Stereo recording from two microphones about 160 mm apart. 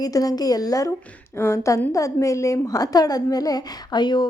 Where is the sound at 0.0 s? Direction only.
20° left (ahead or behind).